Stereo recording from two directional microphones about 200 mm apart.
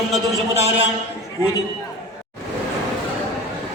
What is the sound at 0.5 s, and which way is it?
Speech, 30° right (ahead or behind).